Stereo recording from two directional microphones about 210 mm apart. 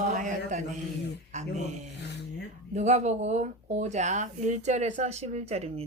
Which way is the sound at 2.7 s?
35° right (ahead or behind).